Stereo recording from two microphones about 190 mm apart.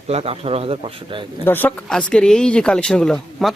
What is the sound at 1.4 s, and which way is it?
Speech, 10° left (ahead or behind).